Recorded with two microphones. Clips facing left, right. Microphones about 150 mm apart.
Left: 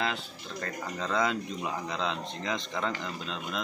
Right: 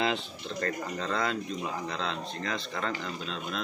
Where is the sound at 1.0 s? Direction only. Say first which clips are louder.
Left 3 dB; 15° left (ahead or behind).